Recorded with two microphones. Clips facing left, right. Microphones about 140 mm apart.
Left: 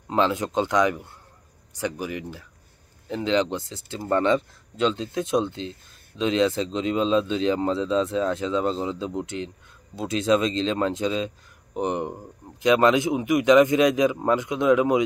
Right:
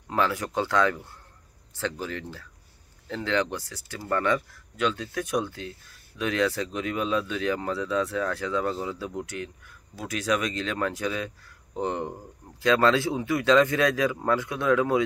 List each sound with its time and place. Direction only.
0.1 s speech: 20° left (ahead or behind)